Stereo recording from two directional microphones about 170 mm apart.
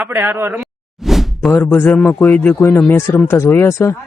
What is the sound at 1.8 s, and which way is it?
Speech, 10° left (ahead or behind).